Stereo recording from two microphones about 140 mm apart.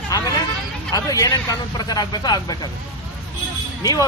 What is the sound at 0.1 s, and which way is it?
Vehicle, 25° left (ahead or behind).